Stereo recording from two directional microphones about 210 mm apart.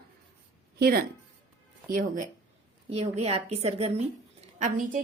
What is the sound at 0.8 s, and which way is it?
A woman's voice, 45° right (ahead or behind).